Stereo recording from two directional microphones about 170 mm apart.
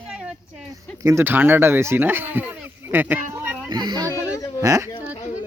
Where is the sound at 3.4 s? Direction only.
10° right (ahead or behind).